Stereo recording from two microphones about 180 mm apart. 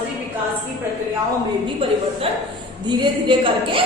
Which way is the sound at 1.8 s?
30° right (ahead or behind).